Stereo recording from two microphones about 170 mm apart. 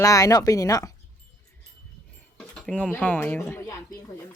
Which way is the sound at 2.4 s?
5° left (ahead or behind).